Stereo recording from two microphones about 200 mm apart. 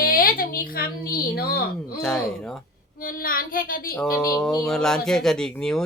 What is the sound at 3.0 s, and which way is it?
Speech, 45° left (ahead or behind).